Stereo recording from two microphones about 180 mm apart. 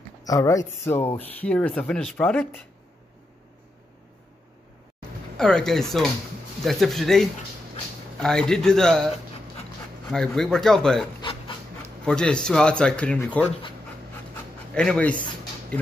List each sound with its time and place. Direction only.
0.2 s speech: 20° left (ahead or behind)
5.4 s speech: 5° left (ahead or behind)
11.1 s dog: 25° left (ahead or behind)
12.0 s speech: 5° left (ahead or behind)
14.7 s speech: 5° left (ahead or behind)